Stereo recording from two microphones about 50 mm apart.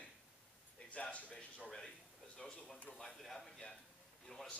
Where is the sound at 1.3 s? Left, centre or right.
Centre.